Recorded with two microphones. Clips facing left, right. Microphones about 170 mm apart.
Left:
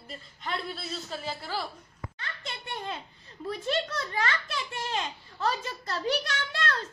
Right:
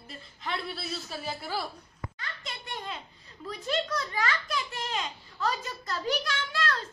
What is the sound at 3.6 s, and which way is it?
A child's voice, 25° left (ahead or behind).